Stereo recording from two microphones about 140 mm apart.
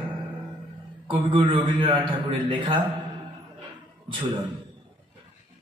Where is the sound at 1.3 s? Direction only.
40° right (ahead or behind).